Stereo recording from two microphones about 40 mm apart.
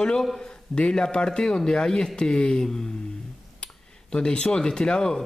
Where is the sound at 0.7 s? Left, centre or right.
Centre.